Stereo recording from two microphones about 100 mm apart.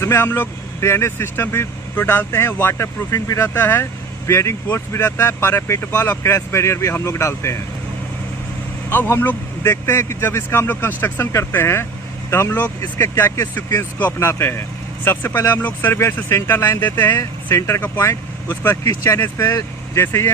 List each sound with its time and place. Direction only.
0.0 s speech: 25° left (ahead or behind)
8.9 s speech: 25° left (ahead or behind)